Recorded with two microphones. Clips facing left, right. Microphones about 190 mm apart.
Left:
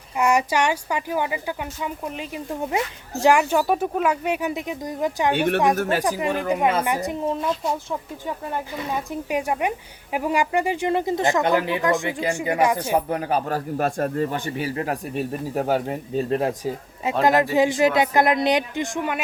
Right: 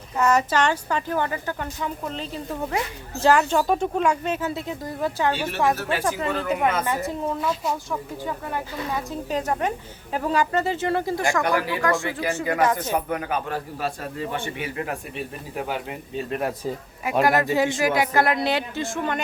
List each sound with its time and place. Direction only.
0.2 s speech: 10° left (ahead or behind)
5.3 s speech: 55° left (ahead or behind)
6.0 s speech: 15° left (ahead or behind)
13.1 s speech: 35° left (ahead or behind)
13.7 s speech: 50° left (ahead or behind)
17.1 s speech: 20° left (ahead or behind)